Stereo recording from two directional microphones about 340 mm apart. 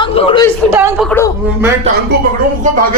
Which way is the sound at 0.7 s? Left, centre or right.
Centre.